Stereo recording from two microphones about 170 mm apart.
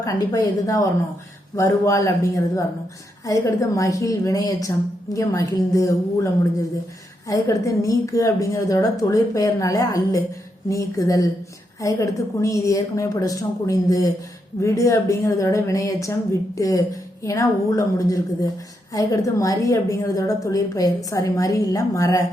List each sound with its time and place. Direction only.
0.0 s a woman's voice: 20° left (ahead or behind)